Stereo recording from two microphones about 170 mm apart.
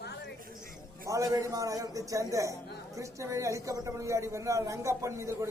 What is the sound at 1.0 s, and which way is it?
A man's voice, 20° right (ahead or behind).